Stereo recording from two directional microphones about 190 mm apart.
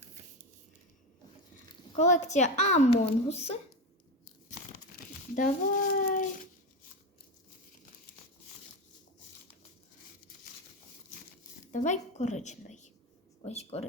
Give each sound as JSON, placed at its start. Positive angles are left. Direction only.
{"t": 2.0, "sound": "speech", "side_deg": 40}
{"t": 5.3, "sound": "speech", "side_deg": 45}
{"t": 11.7, "sound": "a woman's voice", "side_deg": 40}